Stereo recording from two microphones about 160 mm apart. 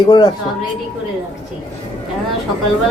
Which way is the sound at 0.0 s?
30° left (ahead or behind).